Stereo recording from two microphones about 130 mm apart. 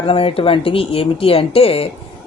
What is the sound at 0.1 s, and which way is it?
Speech, 45° left (ahead or behind).